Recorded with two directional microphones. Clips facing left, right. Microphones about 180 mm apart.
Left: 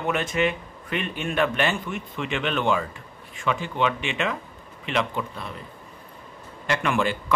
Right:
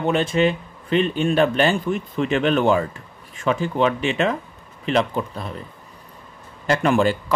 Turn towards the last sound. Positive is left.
turn(degrees=-35)  # may be behind; listen again after turning